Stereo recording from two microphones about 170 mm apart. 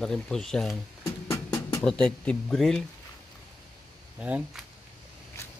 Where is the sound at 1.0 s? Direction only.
20° left (ahead or behind).